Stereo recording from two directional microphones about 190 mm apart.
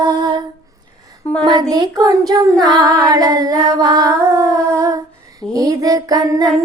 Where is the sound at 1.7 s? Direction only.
20° right (ahead or behind).